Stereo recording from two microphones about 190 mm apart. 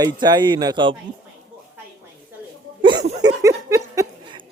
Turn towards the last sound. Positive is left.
turn(degrees=-15)  # may be behind; listen again after turning